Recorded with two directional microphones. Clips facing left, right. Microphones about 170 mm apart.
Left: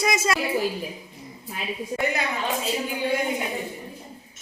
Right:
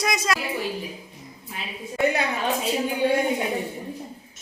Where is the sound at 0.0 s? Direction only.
Centre (ahead or behind).